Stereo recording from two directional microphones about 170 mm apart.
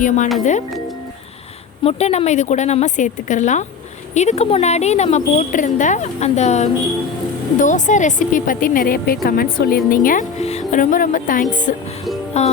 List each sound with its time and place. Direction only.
0.0 s speech: 45° left (ahead or behind)
1.8 s a woman's voice: 40° left (ahead or behind); by 10.2 s 55° left (ahead or behind)
10.4 s a woman's voice: 40° left (ahead or behind)